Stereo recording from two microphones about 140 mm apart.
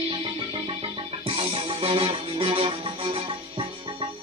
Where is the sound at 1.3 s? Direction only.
40° right (ahead or behind).